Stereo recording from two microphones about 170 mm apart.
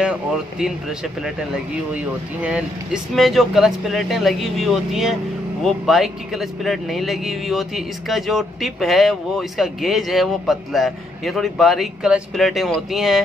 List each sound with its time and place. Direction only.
0.0 s speech: 5° right (ahead or behind)